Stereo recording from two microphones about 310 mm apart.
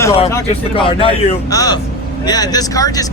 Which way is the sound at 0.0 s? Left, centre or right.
Centre.